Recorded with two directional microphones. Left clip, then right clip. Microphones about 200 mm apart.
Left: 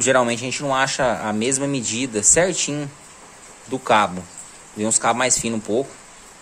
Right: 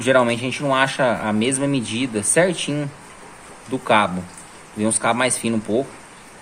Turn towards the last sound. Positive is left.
turn(degrees=15)  # may be behind; listen again after turning